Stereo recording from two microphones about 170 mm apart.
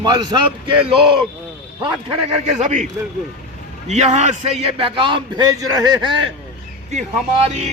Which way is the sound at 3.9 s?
40° right (ahead or behind).